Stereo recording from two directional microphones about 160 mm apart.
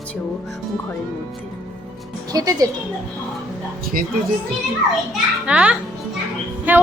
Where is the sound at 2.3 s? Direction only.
25° right (ahead or behind).